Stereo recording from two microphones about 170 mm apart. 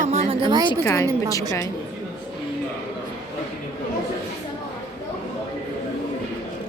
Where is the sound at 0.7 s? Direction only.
20° left (ahead or behind).